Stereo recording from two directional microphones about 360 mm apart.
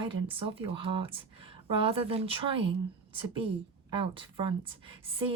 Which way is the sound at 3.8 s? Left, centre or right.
Centre.